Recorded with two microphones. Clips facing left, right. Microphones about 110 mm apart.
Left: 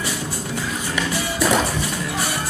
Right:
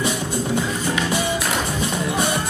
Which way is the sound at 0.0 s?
20° right (ahead or behind).